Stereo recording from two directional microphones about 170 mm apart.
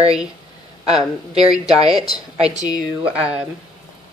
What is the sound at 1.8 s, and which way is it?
Speech, 25° left (ahead or behind).